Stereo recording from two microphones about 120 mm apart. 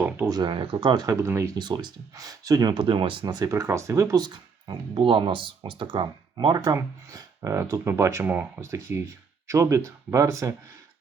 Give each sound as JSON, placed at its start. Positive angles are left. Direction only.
{"t": 0.3, "sound": "speech", "side_deg": -35}
{"t": 1.1, "sound": "speech", "side_deg": -20}
{"t": 1.5, "sound": "speech", "side_deg": -35}
{"t": 2.7, "sound": "speech", "side_deg": -45}
{"t": 6.7, "sound": "speech", "side_deg": -30}